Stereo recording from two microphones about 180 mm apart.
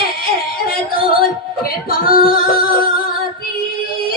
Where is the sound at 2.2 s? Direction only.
55° left (ahead or behind).